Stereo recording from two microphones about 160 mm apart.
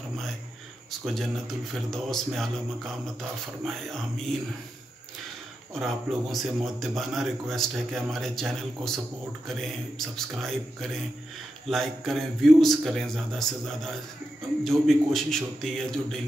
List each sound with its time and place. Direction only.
1.0 s a man's voice: centre (ahead or behind)
5.8 s a man's voice: centre (ahead or behind)